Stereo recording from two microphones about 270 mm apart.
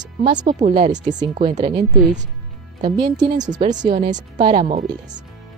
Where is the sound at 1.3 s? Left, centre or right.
Right.